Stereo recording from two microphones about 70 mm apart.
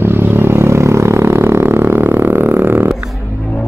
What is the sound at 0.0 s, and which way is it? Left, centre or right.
Music, right.